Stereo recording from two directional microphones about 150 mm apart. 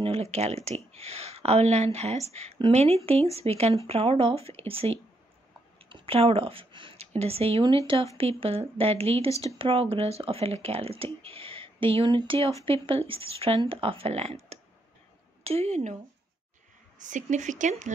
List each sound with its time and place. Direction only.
0.0 s speech: 45° right (ahead or behind)
17.0 s speech: 55° right (ahead or behind)